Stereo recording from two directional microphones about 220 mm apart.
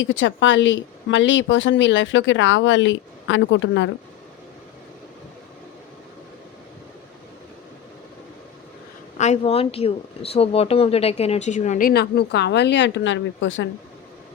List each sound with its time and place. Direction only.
0.0 s a woman's voice: 60° left (ahead or behind)
9.1 s speech: 30° left (ahead or behind); by 13.7 s 60° left (ahead or behind)